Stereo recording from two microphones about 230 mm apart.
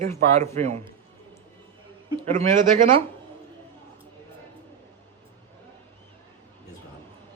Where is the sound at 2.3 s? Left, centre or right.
Right.